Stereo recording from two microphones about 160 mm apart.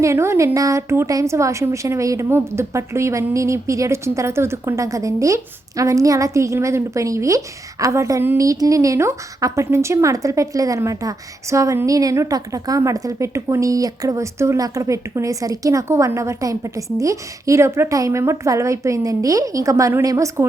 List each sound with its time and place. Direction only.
0.0 s a woman's voice: 15° right (ahead or behind)